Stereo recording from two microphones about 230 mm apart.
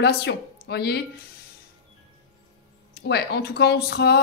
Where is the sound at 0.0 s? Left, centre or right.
Left.